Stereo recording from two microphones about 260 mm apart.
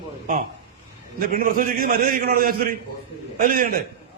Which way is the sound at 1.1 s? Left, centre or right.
Right.